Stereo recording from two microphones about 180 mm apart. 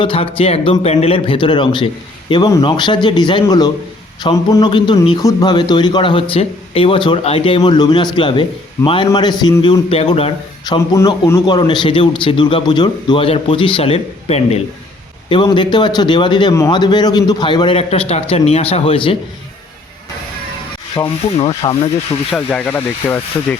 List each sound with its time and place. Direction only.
0.0 s a man's voice: 30° left (ahead or behind)
10.9 s a man's voice: 20° left (ahead or behind)
20.9 s a man's voice: 30° left (ahead or behind)
22.3 s speech: 5° left (ahead or behind)